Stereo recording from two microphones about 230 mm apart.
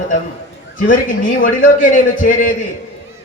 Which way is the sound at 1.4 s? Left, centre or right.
Left.